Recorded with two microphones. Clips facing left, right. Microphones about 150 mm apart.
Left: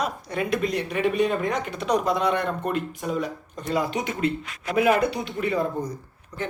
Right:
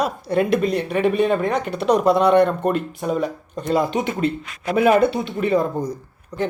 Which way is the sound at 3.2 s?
30° right (ahead or behind).